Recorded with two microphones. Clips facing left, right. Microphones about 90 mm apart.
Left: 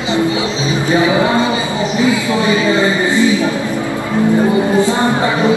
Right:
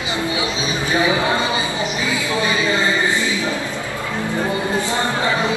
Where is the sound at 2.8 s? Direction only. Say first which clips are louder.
Left 6 dB; 20° left (ahead or behind).